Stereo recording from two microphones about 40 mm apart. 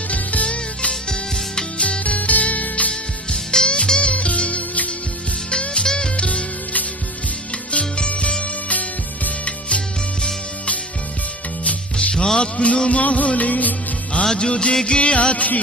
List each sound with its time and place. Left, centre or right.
0.1 s music: left
1.0 s music: centre
1.8 s music: left
2.9 s music: centre; by 4.9 s left
5.5 s music: left
6.1 s music: left
11.9 s music: centre; by 13.7 s left
14.3 s music of bollywood: left